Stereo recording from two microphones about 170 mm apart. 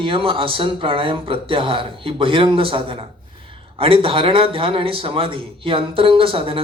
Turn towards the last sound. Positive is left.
turn(degrees=-30)  # may be behind; listen again after turning